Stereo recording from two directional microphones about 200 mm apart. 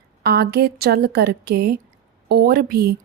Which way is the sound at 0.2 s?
55° right (ahead or behind).